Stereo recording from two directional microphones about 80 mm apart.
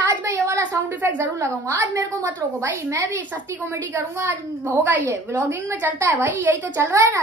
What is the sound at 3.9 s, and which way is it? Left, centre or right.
Speech, right.